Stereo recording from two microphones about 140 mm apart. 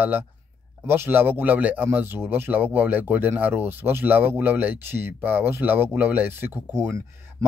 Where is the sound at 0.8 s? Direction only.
15° right (ahead or behind).